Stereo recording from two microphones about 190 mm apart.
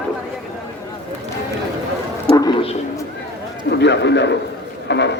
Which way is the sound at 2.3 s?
20° left (ahead or behind).